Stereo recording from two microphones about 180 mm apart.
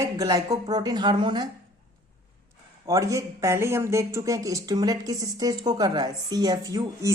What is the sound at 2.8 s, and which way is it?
Speech, 20° right (ahead or behind).